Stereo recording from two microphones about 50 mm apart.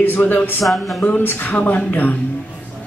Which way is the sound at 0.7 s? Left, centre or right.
Centre.